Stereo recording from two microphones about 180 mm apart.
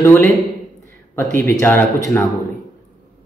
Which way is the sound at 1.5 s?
15° left (ahead or behind).